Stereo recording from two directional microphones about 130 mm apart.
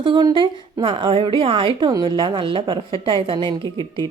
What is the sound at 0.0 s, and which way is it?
A woman's voice, 35° right (ahead or behind).